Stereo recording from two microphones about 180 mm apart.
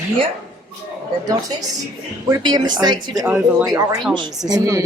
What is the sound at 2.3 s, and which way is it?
Speech, 20° right (ahead or behind).